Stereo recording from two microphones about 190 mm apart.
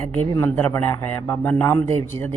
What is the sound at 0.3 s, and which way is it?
Speech, 15° left (ahead or behind).